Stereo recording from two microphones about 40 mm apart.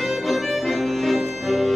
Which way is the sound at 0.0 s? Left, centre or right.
Centre.